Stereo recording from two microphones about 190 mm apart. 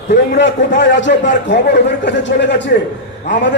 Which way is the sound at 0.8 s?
70° left (ahead or behind).